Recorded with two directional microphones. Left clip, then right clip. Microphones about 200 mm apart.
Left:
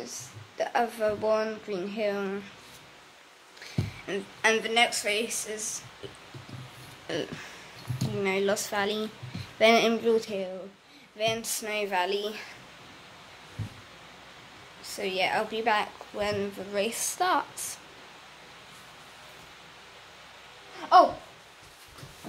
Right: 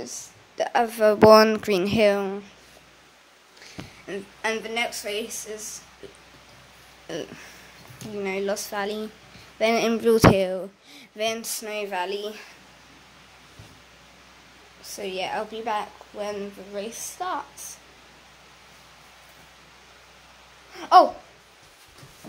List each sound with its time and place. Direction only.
0.6 s a woman's voice: 40° right (ahead or behind)
2.1 s a woman's voice: 25° right (ahead or behind)
3.6 s speech: 10° right (ahead or behind)
7.1 s speech: 10° right (ahead or behind)
10.0 s a sound: 40° right (ahead or behind)
11.1 s a woman's voice: 35° right (ahead or behind)
15.0 s a woman's voice: 15° right (ahead or behind); by 17.5 s 10° left (ahead or behind)
20.9 s a woman's voice: 50° right (ahead or behind)